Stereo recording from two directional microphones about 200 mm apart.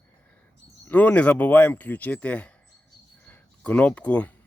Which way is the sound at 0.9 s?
10° left (ahead or behind).